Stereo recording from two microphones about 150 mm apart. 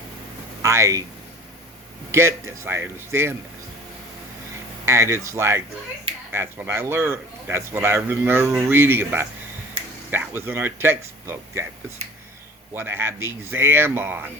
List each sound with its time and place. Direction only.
0.6 s speech: 20° right (ahead or behind)
2.1 s speech: 15° right (ahead or behind)
4.9 s speech: 20° right (ahead or behind)
12.7 s speech: 15° right (ahead or behind)